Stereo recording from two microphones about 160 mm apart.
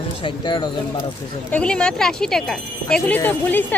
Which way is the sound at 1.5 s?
5° left (ahead or behind).